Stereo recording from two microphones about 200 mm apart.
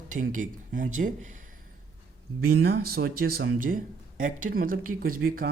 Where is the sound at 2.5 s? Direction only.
50° right (ahead or behind).